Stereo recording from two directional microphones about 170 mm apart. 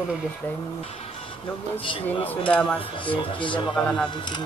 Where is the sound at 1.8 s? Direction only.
30° left (ahead or behind).